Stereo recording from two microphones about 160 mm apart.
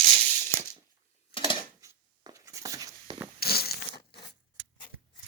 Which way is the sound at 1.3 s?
30° left (ahead or behind).